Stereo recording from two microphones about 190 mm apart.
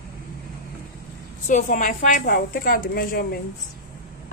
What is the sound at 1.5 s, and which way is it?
A woman's voice, 45° left (ahead or behind).